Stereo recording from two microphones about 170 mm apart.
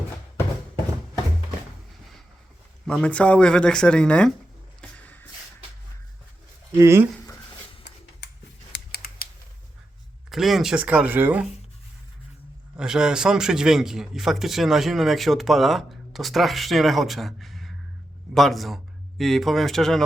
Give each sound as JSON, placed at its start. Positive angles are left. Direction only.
{"t": 2.8, "sound": "a man's voice", "side_deg": 5}
{"t": 4.8, "sound": "music", "side_deg": 10}
{"t": 6.7, "sound": "speech", "side_deg": -15}
{"t": 8.7, "sound": "a sound", "side_deg": 65}
{"t": 10.2, "sound": "speech", "side_deg": 0}
{"t": 12.7, "sound": "a man's voice", "side_deg": -5}